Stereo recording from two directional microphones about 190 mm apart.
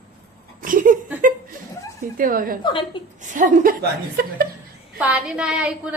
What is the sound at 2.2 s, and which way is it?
Speech, 50° right (ahead or behind).